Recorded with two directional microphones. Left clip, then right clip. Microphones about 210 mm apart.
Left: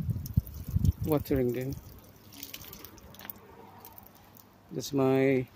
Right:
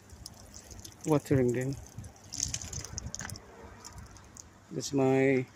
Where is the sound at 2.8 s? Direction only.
25° left (ahead or behind).